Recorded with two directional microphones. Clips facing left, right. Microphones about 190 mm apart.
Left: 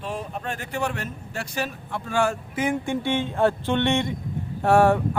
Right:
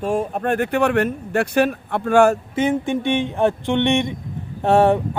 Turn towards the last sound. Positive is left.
turn(degrees=-20)  # may be behind; listen again after turning